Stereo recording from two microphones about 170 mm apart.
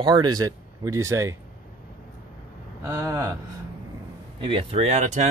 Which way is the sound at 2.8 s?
15° right (ahead or behind).